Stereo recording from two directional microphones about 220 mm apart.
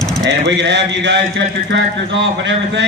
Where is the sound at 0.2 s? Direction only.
50° right (ahead or behind).